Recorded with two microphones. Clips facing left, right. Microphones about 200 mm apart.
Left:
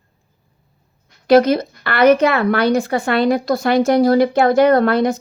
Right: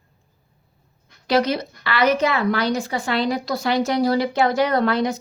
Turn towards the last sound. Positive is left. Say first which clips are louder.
# left 6 dB
turn(degrees=55)  # may be behind; listen again after turning